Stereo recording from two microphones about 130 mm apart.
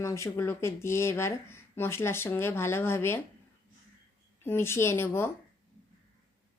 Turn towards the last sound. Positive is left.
turn(degrees=20)  # may be behind; listen again after turning